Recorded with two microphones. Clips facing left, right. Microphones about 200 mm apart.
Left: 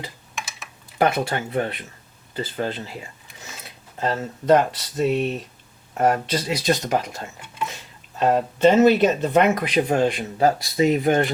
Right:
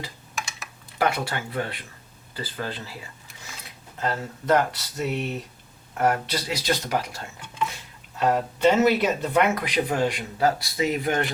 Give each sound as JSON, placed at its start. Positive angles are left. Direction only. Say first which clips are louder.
{"t": 0.3, "sound": "typing", "louder": "right 2 dB", "side_deg": 0}
{"t": 0.9, "sound": "speech", "louder": "left 4 dB", "side_deg": 25}
{"t": 8.2, "sound": "speech", "louder": "left 4 dB", "side_deg": 25}